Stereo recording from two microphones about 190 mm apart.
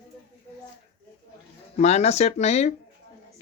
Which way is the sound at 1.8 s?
35° left (ahead or behind).